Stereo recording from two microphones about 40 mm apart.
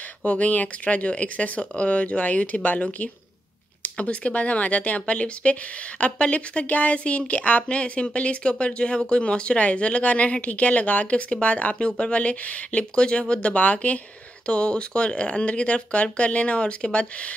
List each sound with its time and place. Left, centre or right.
0.2 s speech: left
4.0 s speech: left
14.4 s speech: left